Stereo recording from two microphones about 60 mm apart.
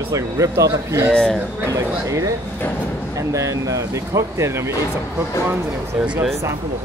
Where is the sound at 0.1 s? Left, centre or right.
Right.